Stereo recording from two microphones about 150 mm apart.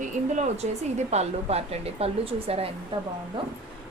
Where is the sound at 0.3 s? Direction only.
50° right (ahead or behind).